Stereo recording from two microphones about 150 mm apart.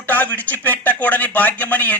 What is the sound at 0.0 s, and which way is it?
A man's voice, 10° left (ahead or behind).